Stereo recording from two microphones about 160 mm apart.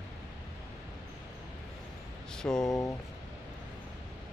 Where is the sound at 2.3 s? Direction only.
5° left (ahead or behind).